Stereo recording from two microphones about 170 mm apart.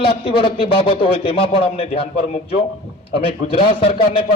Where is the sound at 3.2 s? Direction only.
35° left (ahead or behind).